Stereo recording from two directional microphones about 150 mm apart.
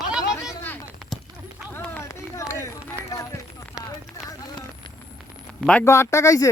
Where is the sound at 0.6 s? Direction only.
15° left (ahead or behind).